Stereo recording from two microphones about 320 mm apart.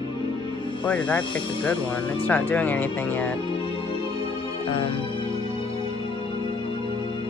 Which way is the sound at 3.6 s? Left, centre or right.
Centre.